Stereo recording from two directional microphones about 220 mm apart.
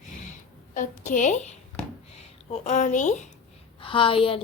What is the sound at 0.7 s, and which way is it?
A woman's voice, 35° left (ahead or behind).